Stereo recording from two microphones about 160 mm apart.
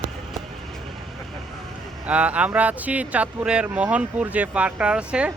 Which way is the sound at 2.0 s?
10° right (ahead or behind).